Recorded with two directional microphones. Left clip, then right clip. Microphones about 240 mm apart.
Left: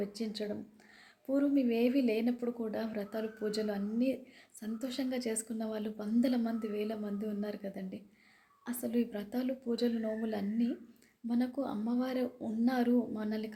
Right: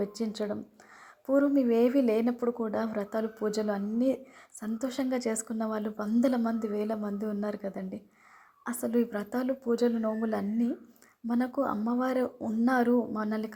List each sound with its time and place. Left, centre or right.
0.0 s speech: centre